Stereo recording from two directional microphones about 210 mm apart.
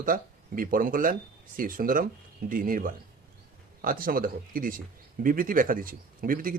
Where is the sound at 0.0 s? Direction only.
40° right (ahead or behind).